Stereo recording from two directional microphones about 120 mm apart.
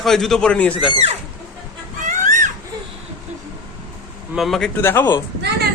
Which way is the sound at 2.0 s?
90° right.